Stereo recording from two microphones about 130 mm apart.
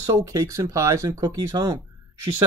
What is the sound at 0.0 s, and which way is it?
Speech, 25° right (ahead or behind).